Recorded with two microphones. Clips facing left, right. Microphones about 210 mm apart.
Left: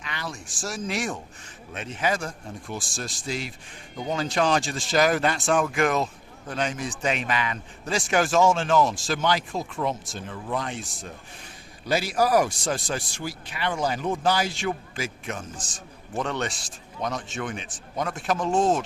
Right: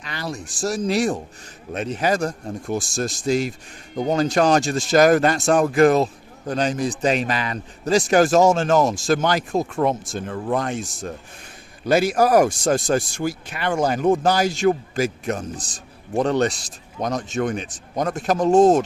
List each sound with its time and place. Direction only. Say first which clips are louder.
0.0 s a man's voice: right 6 dB; 40° right (ahead or behind)